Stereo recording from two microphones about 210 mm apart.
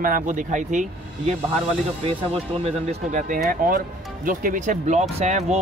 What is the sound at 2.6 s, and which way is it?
Speech, 35° right (ahead or behind).